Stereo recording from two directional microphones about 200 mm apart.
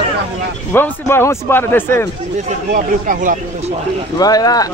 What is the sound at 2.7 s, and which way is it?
Speech, 40° right (ahead or behind).